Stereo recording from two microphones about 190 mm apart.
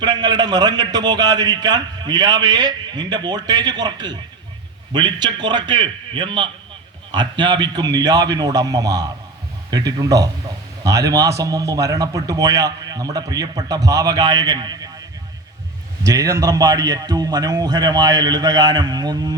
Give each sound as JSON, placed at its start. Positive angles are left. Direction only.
{"t": 0.0, "sound": "a man's voice", "side_deg": -20}
{"t": 16.0, "sound": "a man's voice", "side_deg": -15}